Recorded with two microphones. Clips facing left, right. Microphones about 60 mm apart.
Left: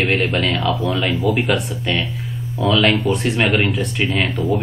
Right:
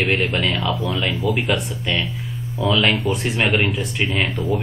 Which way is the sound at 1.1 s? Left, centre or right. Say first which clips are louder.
Left 3 dB; left.